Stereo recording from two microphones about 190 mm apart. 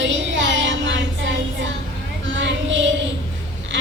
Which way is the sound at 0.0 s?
75° right (ahead or behind).